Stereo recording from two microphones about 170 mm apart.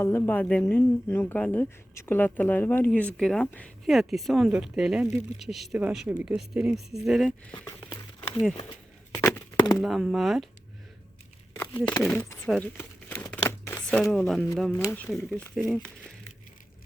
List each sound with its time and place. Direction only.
0.0 s speech: 15° left (ahead or behind)
7.6 s speech: 20° left (ahead or behind)
7.9 s a sound: 5° left (ahead or behind)
9.8 s speech: centre (ahead or behind)
11.9 s speech: 20° left (ahead or behind)
12.7 s crumpling: 15° left (ahead or behind)
14.8 s speech: 10° left (ahead or behind)